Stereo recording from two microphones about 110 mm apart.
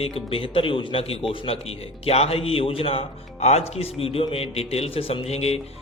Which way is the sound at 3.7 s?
65° left (ahead or behind).